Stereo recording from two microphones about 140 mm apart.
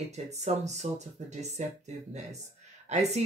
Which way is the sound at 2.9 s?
55° right (ahead or behind).